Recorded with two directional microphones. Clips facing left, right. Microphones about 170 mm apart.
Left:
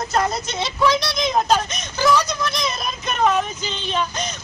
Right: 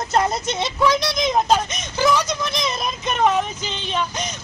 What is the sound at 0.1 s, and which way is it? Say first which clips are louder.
Speech: right 3 dB; 20° right (ahead or behind).